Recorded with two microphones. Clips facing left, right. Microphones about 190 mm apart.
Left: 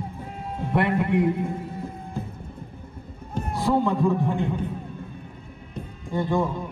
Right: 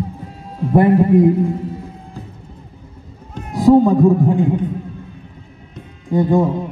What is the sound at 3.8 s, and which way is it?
Speech, 35° right (ahead or behind).